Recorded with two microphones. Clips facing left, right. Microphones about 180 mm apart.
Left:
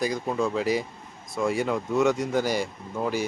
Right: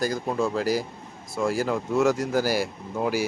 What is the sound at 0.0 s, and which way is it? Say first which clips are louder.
A man's voice: right 1 dB; centre (ahead or behind).